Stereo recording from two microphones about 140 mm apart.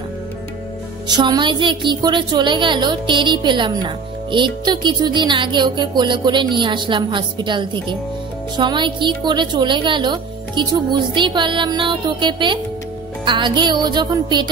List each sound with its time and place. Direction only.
1.0 s a woman's voice: 30° right (ahead or behind)